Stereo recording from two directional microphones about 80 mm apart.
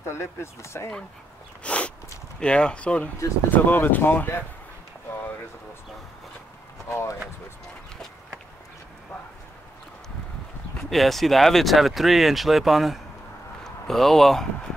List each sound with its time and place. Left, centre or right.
0.0 s speech: left
1.6 s a sound: centre
2.4 s speech: centre
6.9 s speech: left
10.9 s speech: centre